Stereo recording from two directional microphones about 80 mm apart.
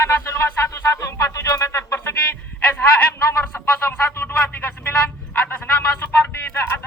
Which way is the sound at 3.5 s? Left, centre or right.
Left.